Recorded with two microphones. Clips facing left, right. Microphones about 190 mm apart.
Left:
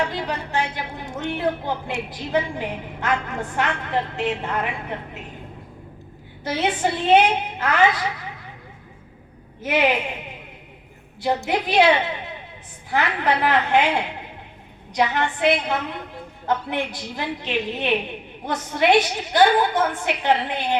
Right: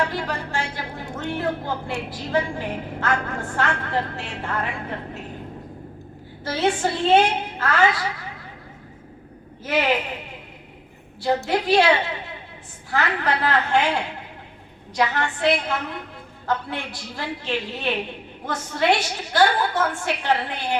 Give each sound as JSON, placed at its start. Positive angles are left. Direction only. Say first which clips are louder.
{"t": 0.1, "sound": "a woman's voice", "louder": "left 1 dB", "side_deg": 20}
{"t": 6.4, "sound": "a woman's voice", "louder": "even", "side_deg": 20}
{"t": 9.6, "sound": "a woman's voice", "louder": "left 3 dB", "side_deg": 20}
{"t": 11.4, "sound": "a woman's voice", "louder": "left 1 dB", "side_deg": 20}